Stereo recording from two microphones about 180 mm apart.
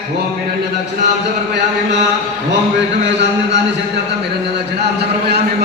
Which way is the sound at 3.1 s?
75° right (ahead or behind).